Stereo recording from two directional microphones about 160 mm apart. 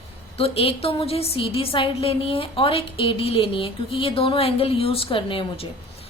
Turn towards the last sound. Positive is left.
turn(degrees=35)  # may be behind; listen again after turning